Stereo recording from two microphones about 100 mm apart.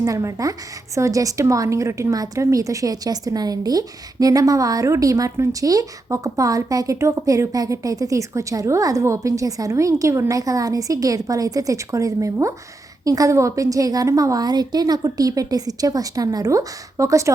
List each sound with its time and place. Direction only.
0.0 s a woman's voice: 30° right (ahead or behind)